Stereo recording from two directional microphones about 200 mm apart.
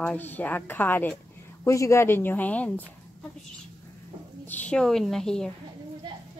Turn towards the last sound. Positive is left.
turn(degrees=0)  # may be behind; listen again after turning